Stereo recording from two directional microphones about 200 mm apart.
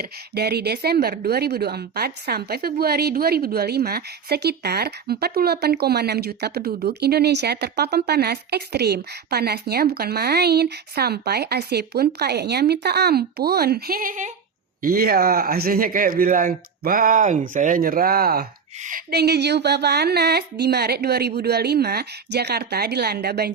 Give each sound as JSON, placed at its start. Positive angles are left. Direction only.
{"t": 0.0, "sound": "a woman's voice", "side_deg": -55}